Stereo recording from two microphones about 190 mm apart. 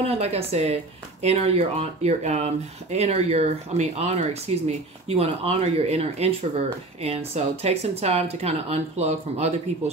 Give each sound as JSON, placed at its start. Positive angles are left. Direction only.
{"t": 0.0, "sound": "speech", "side_deg": -35}